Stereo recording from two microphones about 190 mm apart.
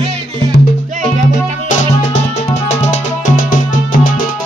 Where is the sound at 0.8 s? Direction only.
40° right (ahead or behind).